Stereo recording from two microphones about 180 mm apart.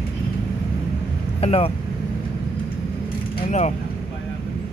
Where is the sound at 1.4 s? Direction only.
35° left (ahead or behind).